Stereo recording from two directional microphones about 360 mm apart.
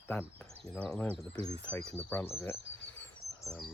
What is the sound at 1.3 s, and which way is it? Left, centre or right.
Speech, centre.